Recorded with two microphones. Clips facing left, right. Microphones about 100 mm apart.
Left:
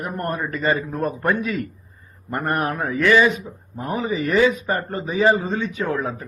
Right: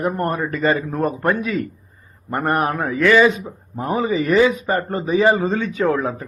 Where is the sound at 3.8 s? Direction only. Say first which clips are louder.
Right 4 dB; 35° right (ahead or behind).